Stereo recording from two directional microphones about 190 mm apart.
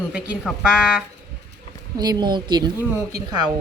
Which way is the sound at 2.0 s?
20° right (ahead or behind).